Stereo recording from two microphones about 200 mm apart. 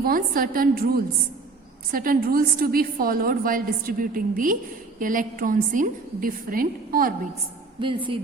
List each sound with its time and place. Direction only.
0.0 s a woman's voice: 45° right (ahead or behind)
7.8 s speech: 25° right (ahead or behind)